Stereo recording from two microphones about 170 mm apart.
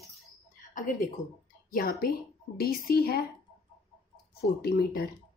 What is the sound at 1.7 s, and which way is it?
Speech, 60° left (ahead or behind).